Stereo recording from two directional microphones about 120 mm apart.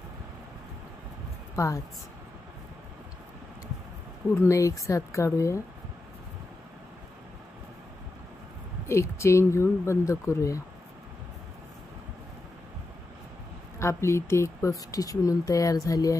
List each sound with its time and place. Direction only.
1.6 s speech: 25° left (ahead or behind)
4.4 s speech: 25° left (ahead or behind)
8.8 s speech: 25° left (ahead or behind)
13.7 s speech: 25° left (ahead or behind)